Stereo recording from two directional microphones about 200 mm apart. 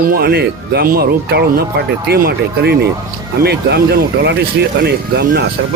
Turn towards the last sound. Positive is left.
turn(degrees=-55)  # may be behind; listen again after turning